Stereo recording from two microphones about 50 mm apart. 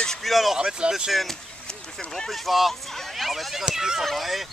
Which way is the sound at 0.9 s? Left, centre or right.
Centre.